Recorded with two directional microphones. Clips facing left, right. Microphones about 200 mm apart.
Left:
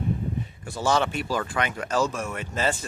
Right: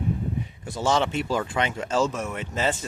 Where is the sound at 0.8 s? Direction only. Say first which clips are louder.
Right 1 dB; 20° right (ahead or behind).